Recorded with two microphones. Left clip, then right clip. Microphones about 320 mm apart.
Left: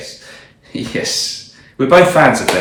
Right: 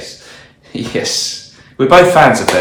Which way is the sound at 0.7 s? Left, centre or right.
Centre.